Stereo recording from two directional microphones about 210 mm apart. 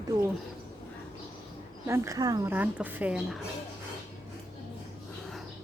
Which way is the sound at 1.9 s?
15° right (ahead or behind).